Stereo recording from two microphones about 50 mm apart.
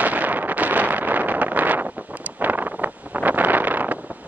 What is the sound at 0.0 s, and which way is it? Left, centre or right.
Wind noise, right.